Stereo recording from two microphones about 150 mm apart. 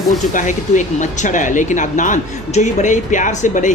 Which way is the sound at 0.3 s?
55° left (ahead or behind).